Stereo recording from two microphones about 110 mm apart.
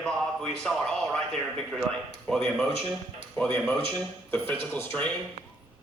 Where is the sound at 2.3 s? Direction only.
Centre (ahead or behind).